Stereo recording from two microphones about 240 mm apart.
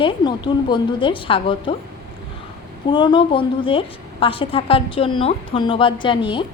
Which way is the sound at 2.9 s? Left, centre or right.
Centre.